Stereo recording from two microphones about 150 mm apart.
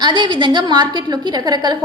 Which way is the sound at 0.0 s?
30° right (ahead or behind).